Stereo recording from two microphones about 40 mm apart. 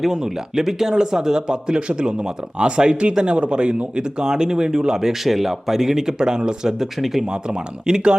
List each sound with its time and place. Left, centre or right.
0.0 s speech: centre
7.3 s speech: centre